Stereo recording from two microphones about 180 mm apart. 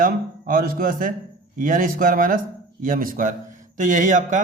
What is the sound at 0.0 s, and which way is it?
A man's voice, 50° right (ahead or behind).